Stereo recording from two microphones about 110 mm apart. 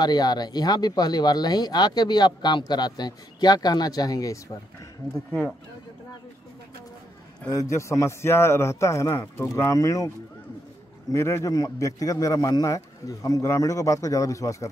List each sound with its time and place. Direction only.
0.0 s speech: 40° left (ahead or behind)
7.4 s a man's voice: 30° left (ahead or behind)